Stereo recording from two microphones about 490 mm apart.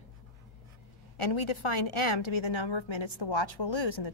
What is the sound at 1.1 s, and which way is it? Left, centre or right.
A woman's voice, left.